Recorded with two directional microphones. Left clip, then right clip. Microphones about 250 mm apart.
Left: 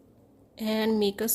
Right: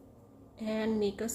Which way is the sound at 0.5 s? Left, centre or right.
Left.